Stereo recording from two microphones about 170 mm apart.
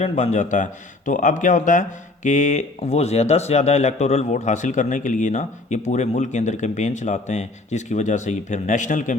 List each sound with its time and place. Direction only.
0.0 s speech: 40° left (ahead or behind)